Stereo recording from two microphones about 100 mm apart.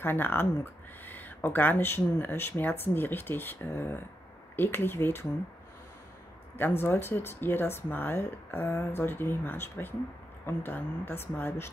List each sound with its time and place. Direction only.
0.0 s speech: 20° left (ahead or behind)
6.6 s speech: 25° left (ahead or behind)